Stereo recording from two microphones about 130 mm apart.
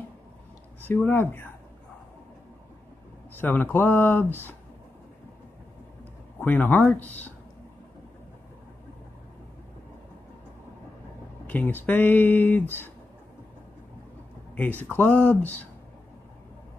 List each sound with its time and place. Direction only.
0.9 s speech: 15° left (ahead or behind)
3.3 s speech: 15° left (ahead or behind)
6.4 s speech: 15° left (ahead or behind)
11.4 s speech: 10° left (ahead or behind)
14.5 s speech: 15° left (ahead or behind)